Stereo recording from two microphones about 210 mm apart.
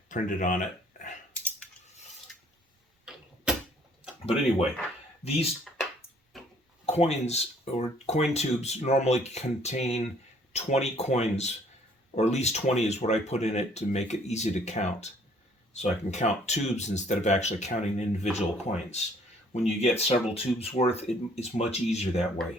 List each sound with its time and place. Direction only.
0.1 s a sound: 40° left (ahead or behind)
5.2 s speech: 30° left (ahead or behind)
6.3 s tick-tock: centre (ahead or behind)
6.8 s speech: 30° left (ahead or behind)